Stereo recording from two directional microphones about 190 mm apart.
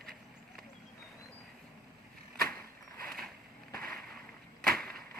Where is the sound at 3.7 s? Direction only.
5° left (ahead or behind).